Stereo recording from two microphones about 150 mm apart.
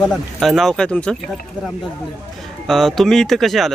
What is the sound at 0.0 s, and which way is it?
Speech, centre (ahead or behind).